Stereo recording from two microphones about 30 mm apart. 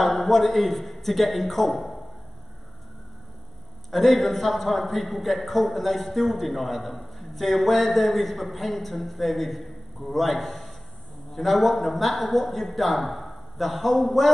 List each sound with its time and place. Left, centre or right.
0.0 s a man's voice: centre
3.9 s a man's voice: centre